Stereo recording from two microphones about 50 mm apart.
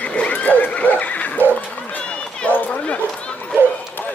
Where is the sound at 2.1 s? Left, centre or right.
Left.